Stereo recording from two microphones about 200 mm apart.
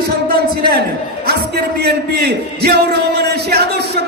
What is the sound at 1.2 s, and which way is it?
A man's voice, 55° right (ahead or behind).